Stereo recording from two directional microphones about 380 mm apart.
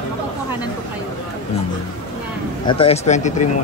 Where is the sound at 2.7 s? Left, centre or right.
Centre.